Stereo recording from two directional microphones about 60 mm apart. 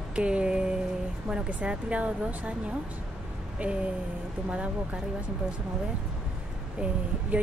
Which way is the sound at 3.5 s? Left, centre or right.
Centre.